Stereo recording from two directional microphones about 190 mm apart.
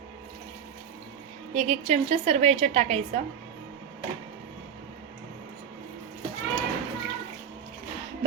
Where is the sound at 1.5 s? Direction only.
35° right (ahead or behind).